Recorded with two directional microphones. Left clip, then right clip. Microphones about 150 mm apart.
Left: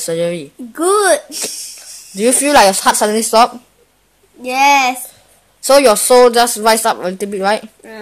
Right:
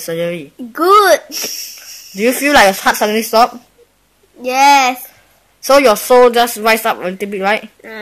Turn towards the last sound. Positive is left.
turn(degrees=10)  # may be behind; listen again after turning